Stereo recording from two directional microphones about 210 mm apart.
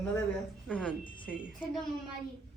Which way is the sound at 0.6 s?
Centre (ahead or behind).